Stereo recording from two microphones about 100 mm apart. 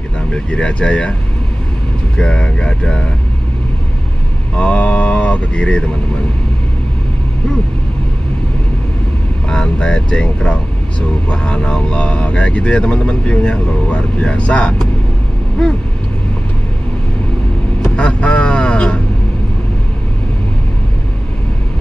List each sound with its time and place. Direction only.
0.3 s speech: 10° left (ahead or behind)
2.1 s speech: 10° left (ahead or behind)
4.6 s mantra: 10° left (ahead or behind)
9.5 s speech: 10° left (ahead or behind)
17.9 s vehicle: 10° left (ahead or behind)